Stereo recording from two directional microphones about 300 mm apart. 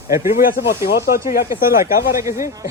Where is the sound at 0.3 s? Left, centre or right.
Left.